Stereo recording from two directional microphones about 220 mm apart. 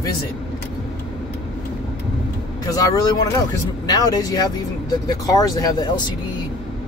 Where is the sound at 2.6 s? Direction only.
15° left (ahead or behind).